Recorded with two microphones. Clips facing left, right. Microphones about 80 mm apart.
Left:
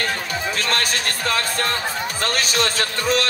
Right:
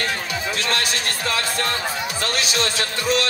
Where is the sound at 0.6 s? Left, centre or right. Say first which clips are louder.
Left 1 dB; left.